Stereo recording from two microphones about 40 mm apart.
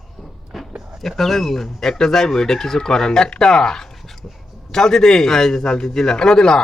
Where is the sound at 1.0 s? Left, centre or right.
Centre.